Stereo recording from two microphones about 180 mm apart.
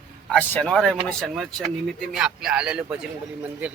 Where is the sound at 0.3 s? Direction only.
5° left (ahead or behind).